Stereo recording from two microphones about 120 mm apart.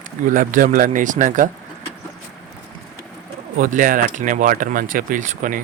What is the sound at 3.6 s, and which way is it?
Speech, 90° right.